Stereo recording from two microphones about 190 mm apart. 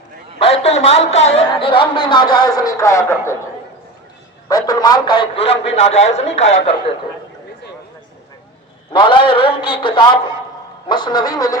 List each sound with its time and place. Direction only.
0.3 s a man's voice: 30° left (ahead or behind); by 3.3 s 15° left (ahead or behind)
4.4 s a man's voice: 20° left (ahead or behind); by 6.7 s 35° left (ahead or behind)
8.9 s a man's voice: 25° left (ahead or behind)